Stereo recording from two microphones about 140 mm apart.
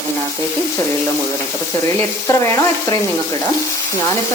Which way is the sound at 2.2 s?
20° left (ahead or behind).